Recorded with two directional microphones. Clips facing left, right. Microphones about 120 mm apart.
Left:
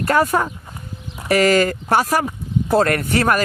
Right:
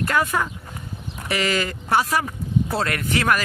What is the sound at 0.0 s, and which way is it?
Speech, 40° left (ahead or behind).